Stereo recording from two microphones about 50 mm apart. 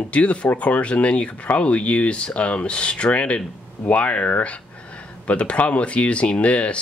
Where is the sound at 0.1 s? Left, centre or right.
Left.